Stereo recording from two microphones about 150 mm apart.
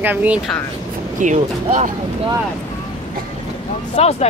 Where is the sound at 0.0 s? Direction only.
10° right (ahead or behind).